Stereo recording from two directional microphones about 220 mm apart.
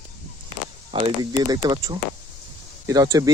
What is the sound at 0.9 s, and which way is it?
Speech, 20° right (ahead or behind).